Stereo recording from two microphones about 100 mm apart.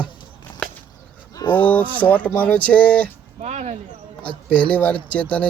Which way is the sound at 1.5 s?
15° left (ahead or behind).